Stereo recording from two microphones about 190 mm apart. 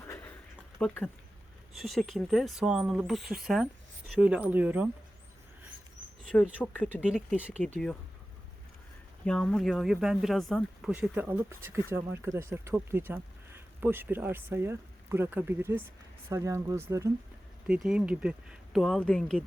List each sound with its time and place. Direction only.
0.8 s speech: 5° left (ahead or behind)
6.3 s speech: 5° left (ahead or behind)
6.8 s speech: 5° right (ahead or behind)
9.2 s speech: 5° left (ahead or behind); by 17.1 s 15° right (ahead or behind)
17.7 s speech: 5° right (ahead or behind)